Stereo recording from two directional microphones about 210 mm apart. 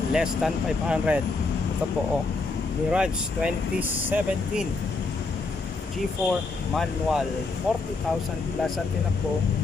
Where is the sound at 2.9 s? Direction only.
5° right (ahead or behind).